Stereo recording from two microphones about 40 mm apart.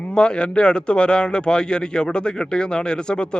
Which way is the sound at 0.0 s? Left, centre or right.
Left.